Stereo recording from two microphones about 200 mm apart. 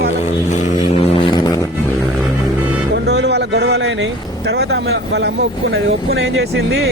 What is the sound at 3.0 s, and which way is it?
Speech, 55° right (ahead or behind).